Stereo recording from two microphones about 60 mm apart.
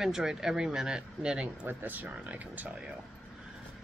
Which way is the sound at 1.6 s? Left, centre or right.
Right.